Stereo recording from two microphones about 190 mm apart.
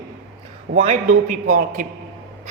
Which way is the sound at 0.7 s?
55° right (ahead or behind).